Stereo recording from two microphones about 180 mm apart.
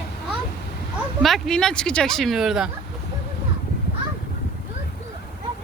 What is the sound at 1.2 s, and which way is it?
Speech, centre (ahead or behind).